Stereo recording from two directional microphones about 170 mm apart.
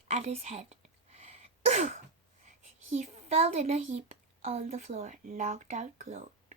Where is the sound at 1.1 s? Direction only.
40° right (ahead or behind).